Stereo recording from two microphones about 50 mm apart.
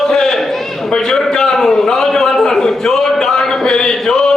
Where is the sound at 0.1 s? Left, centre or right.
Centre.